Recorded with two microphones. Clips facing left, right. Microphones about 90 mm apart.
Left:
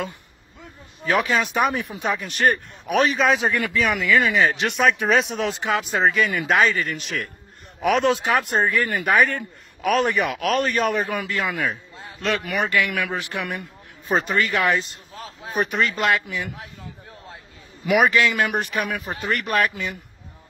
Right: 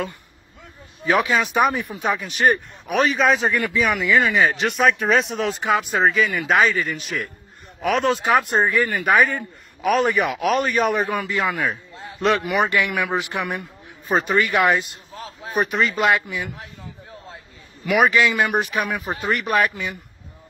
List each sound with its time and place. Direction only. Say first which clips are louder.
1.1 s speech: right 2 dB; centre (ahead or behind)
4.5 s a man's voice: right 1 dB; centre (ahead or behind)
12.2 s a man's voice: right 5 dB; 30° right (ahead or behind)
13.6 s a man's voice: right 2 dB; centre (ahead or behind)
14.5 s a man's voice: right 3 dB; 15° right (ahead or behind)
15.7 s speech: right 2 dB; centre (ahead or behind)
17.9 s speech: right 1 dB; centre (ahead or behind)